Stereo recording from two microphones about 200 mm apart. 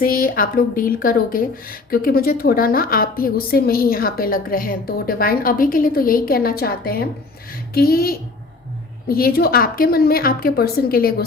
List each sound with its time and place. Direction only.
0.0 s speech: 45° left (ahead or behind)